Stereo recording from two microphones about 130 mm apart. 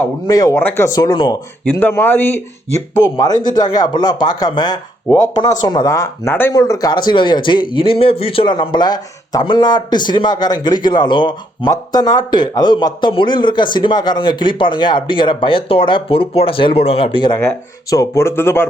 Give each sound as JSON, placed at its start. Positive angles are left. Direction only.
{"t": 0.3, "sound": "speech", "side_deg": 30}
{"t": 0.9, "sound": "a man's voice", "side_deg": 35}
{"t": 1.8, "sound": "speech", "side_deg": 15}
{"t": 3.2, "sound": "a man's voice", "side_deg": 30}
{"t": 6.5, "sound": "a man's voice", "side_deg": 30}
{"t": 17.4, "sound": "speech", "side_deg": 25}